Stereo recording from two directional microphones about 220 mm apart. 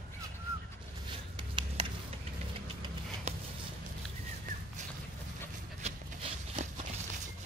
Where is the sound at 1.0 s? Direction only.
20° right (ahead or behind).